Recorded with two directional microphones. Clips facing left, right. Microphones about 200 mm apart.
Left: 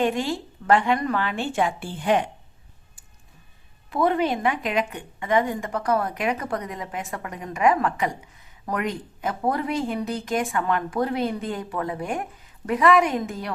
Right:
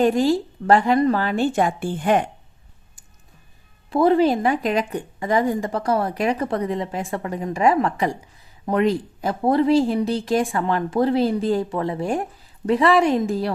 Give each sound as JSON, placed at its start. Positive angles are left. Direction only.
{"t": 0.0, "sound": "a woman's voice", "side_deg": -40}
{"t": 3.8, "sound": "a woman's voice", "side_deg": -30}